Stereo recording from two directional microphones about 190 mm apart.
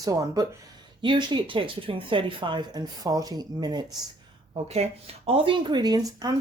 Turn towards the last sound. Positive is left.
turn(degrees=-20)  # may be behind; listen again after turning